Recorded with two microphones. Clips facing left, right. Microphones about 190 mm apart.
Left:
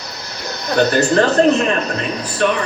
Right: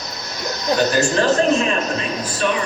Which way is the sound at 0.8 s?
60° left (ahead or behind).